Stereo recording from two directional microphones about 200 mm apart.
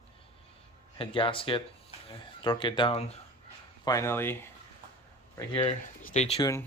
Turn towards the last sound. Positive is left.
turn(degrees=15)  # may be behind; listen again after turning